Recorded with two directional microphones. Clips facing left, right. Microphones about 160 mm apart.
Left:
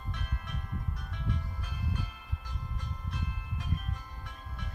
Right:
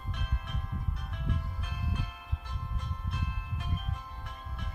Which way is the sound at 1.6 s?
5° right (ahead or behind).